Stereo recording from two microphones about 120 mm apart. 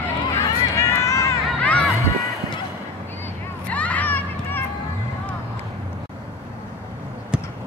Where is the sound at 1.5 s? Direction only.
10° left (ahead or behind).